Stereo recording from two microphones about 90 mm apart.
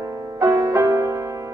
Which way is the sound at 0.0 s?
35° right (ahead or behind).